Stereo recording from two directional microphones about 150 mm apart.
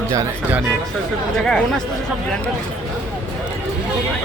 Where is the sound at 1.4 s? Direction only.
5° left (ahead or behind).